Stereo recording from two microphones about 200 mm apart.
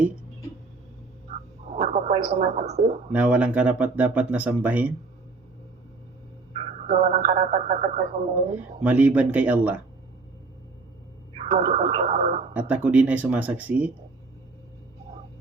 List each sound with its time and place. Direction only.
1.7 s a sound: 35° right (ahead or behind)
2.3 s speech: 35° right (ahead or behind)
3.1 s speech: 5° right (ahead or behind)
6.8 s speech: 35° right (ahead or behind)
8.8 s speech: 10° right (ahead or behind)
11.3 s speech: 35° right (ahead or behind)
12.5 s speech: 5° right (ahead or behind)